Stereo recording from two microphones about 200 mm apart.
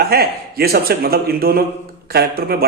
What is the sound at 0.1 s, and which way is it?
A man's voice, 50° right (ahead or behind).